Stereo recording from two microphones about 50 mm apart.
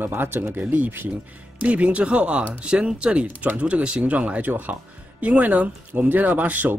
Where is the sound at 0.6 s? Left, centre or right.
Right.